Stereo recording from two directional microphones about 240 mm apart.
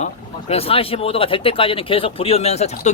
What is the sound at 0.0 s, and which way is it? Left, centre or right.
Speech, left.